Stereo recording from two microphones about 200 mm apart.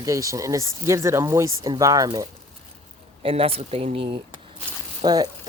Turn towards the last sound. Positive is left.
turn(degrees=-20)  # may be behind; listen again after turning